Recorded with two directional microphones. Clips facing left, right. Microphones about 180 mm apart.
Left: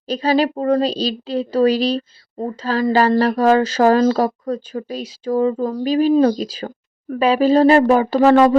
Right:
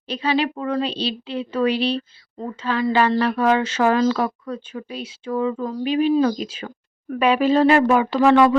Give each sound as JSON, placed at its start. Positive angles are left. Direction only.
{"t": 0.1, "sound": "a woman's voice", "side_deg": 40}